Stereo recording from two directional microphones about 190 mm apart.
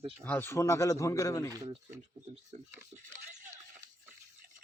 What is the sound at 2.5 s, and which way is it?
Speech, 35° right (ahead or behind).